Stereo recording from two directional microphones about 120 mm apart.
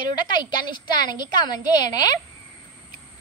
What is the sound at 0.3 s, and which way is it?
A woman's voice, 35° left (ahead or behind).